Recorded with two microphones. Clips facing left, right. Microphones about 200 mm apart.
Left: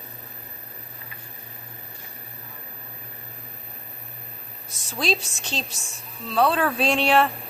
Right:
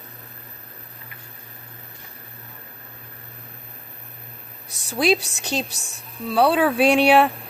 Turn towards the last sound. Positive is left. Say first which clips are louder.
# right 5 dB
turn(degrees=-15)  # may be behind; listen again after turning